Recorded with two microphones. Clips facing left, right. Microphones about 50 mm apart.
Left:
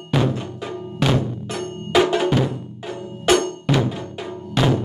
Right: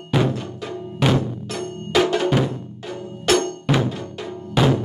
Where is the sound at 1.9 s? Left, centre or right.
Centre.